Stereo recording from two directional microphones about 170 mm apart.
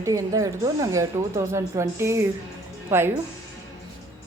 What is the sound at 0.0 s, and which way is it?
Speech, 20° right (ahead or behind).